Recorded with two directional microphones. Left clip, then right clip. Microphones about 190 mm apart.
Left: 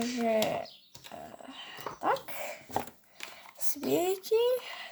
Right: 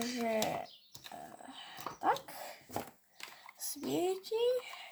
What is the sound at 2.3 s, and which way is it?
Dog, 30° left (ahead or behind).